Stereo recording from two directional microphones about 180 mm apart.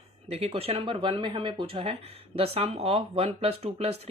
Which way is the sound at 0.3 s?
35° right (ahead or behind).